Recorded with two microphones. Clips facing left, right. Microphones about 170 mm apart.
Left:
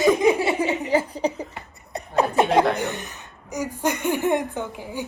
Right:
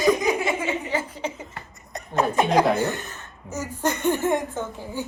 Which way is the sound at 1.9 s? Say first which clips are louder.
Left 2 dB; 30° left (ahead or behind).